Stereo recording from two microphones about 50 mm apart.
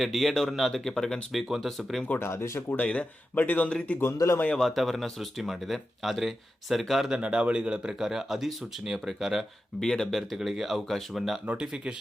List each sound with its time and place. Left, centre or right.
0.0 s speech: centre
1.3 s speech: centre
2.1 s speech: left
2.8 s speech: centre
3.3 s speech: left
4.6 s speech: centre
7.1 s speech: right; by 9.5 s centre
9.8 s speech: centre
11.5 s speech: centre